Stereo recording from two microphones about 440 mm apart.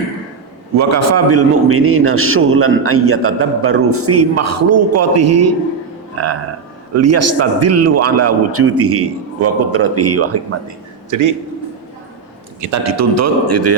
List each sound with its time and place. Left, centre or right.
0.8 s a man's voice: right
6.9 s a man's voice: right
11.1 s a man's voice: right
12.5 s a man's voice: right